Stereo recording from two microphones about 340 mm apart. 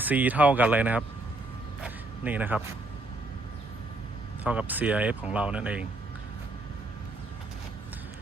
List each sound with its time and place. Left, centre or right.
0.0 s speech: centre
1.8 s a sound: centre
4.4 s speech: centre